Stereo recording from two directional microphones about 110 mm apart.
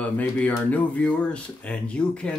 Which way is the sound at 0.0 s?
15° left (ahead or behind).